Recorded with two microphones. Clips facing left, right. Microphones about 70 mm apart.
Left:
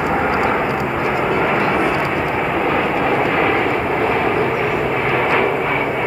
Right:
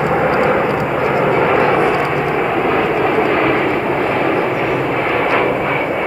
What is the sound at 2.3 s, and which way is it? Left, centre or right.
Vehicle, centre.